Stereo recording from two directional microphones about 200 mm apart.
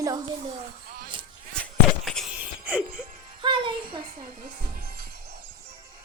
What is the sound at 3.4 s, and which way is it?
Music, 25° right (ahead or behind).